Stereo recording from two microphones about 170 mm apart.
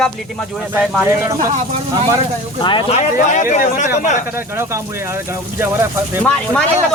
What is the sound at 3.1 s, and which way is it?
Speech, 50° left (ahead or behind).